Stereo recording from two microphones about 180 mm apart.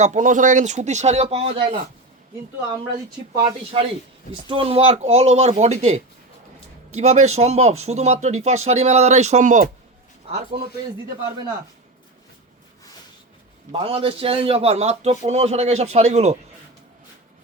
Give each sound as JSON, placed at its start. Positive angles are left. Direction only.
{"t": 0.0, "sound": "speech", "side_deg": -45}
{"t": 4.3, "sound": "speech", "side_deg": -30}
{"t": 10.3, "sound": "speech", "side_deg": -35}
{"t": 13.7, "sound": "speech", "side_deg": -30}